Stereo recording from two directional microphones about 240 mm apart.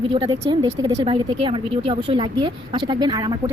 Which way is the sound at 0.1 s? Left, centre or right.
Centre.